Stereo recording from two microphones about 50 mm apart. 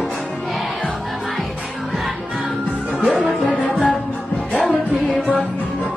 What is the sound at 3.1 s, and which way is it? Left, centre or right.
Music, centre.